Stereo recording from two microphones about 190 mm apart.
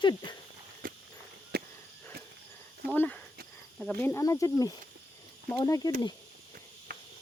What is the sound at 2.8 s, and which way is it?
Speech, 10° left (ahead or behind).